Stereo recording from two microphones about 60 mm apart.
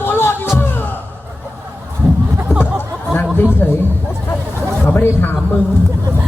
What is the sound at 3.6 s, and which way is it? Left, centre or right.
Speech, left.